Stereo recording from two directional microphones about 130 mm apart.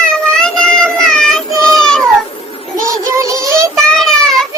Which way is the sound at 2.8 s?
25° right (ahead or behind).